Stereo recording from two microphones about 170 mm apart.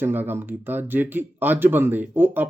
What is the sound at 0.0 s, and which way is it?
Speech, 10° right (ahead or behind).